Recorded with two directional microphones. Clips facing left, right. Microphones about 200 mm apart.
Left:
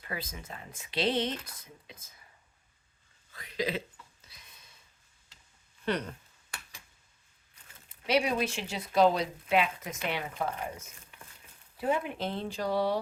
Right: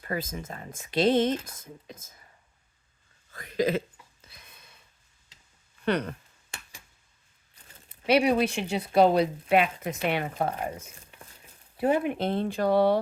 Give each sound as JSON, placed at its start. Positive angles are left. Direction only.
{"t": 0.0, "sound": "speech", "side_deg": -45}
{"t": 3.3, "sound": "speech", "side_deg": -50}
{"t": 4.3, "sound": "a sound", "side_deg": -55}
{"t": 5.8, "sound": "speech", "side_deg": -65}
{"t": 8.0, "sound": "speech", "side_deg": -65}
{"t": 11.8, "sound": "speech", "side_deg": -65}